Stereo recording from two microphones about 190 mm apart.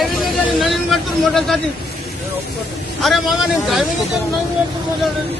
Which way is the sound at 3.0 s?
Centre (ahead or behind).